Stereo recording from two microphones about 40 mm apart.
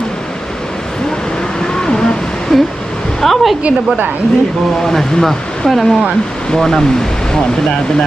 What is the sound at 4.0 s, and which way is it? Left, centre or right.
Speech, right.